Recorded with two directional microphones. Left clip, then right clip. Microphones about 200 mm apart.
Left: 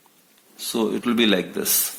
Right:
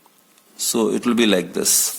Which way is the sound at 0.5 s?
35° right (ahead or behind).